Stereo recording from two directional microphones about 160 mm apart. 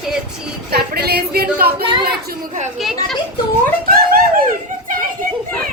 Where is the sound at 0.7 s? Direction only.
80° right.